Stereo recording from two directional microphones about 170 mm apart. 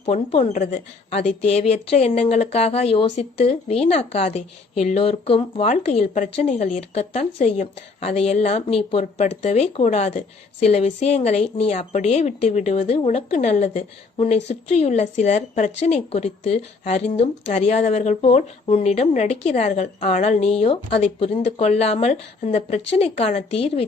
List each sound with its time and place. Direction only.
0.0 s a woman's voice: 35° left (ahead or behind)